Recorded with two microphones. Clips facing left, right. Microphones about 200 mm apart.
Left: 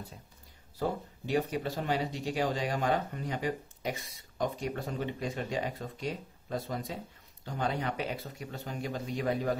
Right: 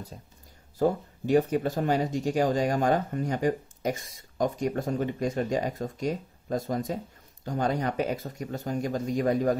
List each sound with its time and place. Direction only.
0.7 s speech: 45° right (ahead or behind)